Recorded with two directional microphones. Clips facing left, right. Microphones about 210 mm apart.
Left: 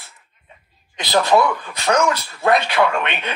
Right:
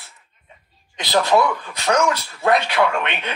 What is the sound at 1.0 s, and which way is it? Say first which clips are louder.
Speech: left 1 dB; 55° left (ahead or behind).